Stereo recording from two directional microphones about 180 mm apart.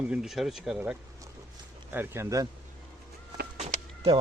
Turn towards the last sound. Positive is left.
turn(degrees=-35)  # may be behind; listen again after turning